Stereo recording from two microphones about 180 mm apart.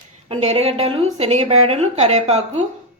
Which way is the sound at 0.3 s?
35° right (ahead or behind).